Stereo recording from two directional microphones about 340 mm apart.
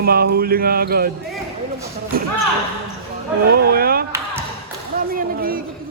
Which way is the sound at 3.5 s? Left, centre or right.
Right.